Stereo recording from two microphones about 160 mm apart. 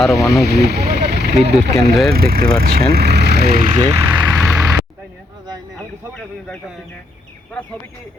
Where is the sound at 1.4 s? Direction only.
90° right.